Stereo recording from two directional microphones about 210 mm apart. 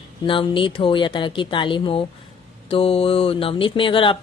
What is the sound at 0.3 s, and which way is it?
Speech, 25° left (ahead or behind).